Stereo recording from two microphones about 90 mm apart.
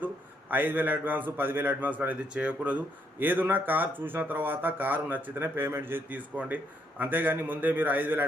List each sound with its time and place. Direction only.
0.5 s a man's voice: 20° right (ahead or behind)